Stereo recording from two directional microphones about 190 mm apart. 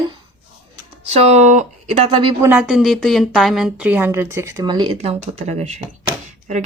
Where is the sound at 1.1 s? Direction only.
35° right (ahead or behind).